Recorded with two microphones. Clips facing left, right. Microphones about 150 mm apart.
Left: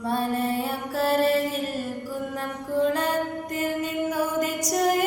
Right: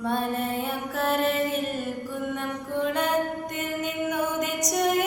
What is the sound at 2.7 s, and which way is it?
Music, 30° left (ahead or behind).